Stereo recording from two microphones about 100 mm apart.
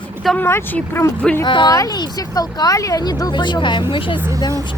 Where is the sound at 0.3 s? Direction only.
20° left (ahead or behind).